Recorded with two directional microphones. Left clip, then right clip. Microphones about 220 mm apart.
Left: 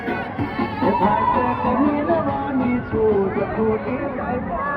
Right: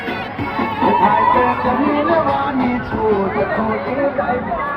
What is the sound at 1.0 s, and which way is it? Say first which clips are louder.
Music: right 6 dB; 45° left (ahead or behind).